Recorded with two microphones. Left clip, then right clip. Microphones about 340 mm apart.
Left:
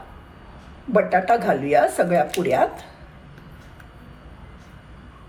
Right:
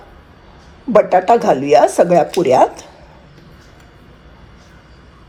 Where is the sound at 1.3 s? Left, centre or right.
Right.